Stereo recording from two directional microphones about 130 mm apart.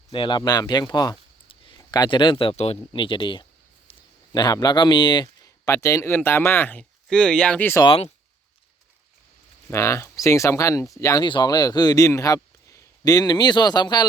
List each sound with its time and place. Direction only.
0.1 s speech: 40° left (ahead or behind)
1.5 s a sound: 40° left (ahead or behind)
1.8 s speech: 30° left (ahead or behind)
5.6 s speech: 20° left (ahead or behind)
7.9 s speech: 50° left (ahead or behind)
9.6 s speech: 20° left (ahead or behind)